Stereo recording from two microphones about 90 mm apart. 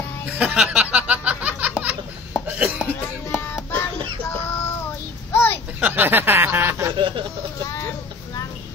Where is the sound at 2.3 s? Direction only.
10° right (ahead or behind).